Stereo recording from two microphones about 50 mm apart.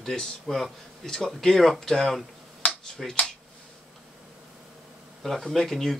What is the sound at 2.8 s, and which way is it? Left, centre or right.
Finger snapping, centre.